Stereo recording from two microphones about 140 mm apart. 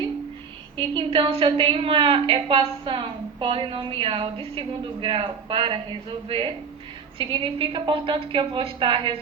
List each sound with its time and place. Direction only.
0.8 s a woman's voice: 35° right (ahead or behind)